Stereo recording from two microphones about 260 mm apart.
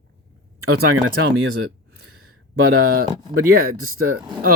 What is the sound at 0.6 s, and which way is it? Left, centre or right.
Speech, right.